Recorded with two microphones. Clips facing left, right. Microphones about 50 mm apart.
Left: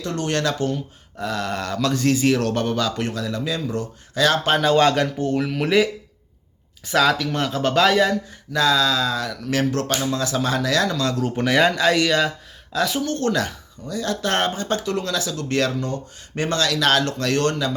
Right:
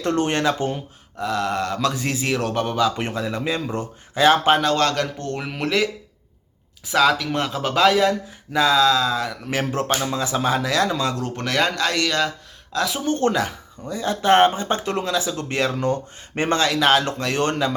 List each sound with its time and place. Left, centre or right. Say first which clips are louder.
0.0 s speech: right 5 dB; right
0.3 s speech: right 1 dB; right
1.2 s speech: right 3 dB; centre
3.0 s speech: even; right
4.6 s speech: left 3 dB; centre
5.4 s speech: left 6 dB; centre
5.6 s speech: left 1 dB; centre
9.7 s speech: even; right
11.1 s speech: left 4 dB; centre
13.1 s speech: right 2 dB; right
15.7 s speech: right 4 dB; right; by 17.4 s centre